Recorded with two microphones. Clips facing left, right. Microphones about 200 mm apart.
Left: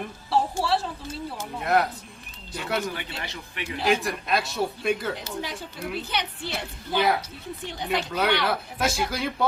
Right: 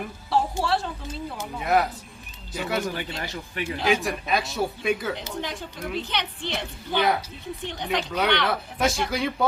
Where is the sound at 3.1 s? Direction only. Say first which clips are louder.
Right 3 dB; 40° right (ahead or behind).